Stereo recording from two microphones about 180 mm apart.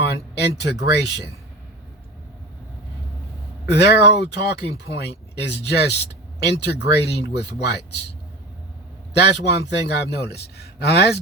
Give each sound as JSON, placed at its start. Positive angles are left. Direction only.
{"t": 0.0, "sound": "speech", "side_deg": 70}
{"t": 3.7, "sound": "speech", "side_deg": 70}
{"t": 9.1, "sound": "speech", "side_deg": 70}